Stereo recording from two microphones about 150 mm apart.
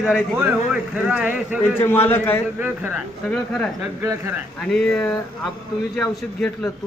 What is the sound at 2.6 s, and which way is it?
Speech, 10° right (ahead or behind).